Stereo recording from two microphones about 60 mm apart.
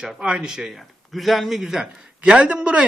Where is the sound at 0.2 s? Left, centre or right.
Centre.